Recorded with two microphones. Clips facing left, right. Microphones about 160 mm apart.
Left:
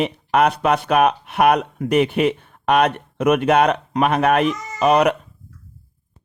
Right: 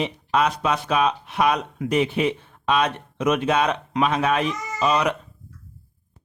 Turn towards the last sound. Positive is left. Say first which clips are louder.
# left 6 dB
turn(degrees=60)  # may be behind; listen again after turning